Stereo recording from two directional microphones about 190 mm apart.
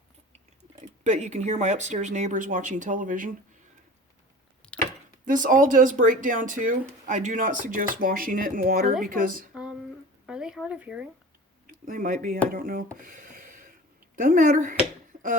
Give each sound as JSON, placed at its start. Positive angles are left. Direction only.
{"t": 1.0, "sound": "speech", "side_deg": -40}
{"t": 4.6, "sound": "chopping", "side_deg": 5}
{"t": 5.2, "sound": "speech", "side_deg": -45}
{"t": 10.2, "sound": "a sound", "side_deg": -5}
{"t": 11.6, "sound": "speech", "side_deg": -45}